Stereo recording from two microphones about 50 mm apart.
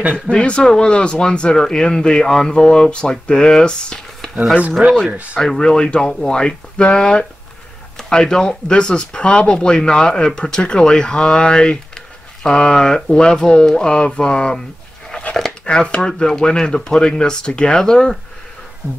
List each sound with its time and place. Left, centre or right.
0.1 s speech: centre
4.8 s speech: right
5.4 s speech: centre
15.6 s speech: centre